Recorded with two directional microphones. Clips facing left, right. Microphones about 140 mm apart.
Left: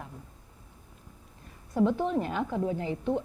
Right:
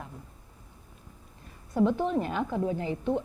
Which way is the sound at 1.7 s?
15° right (ahead or behind).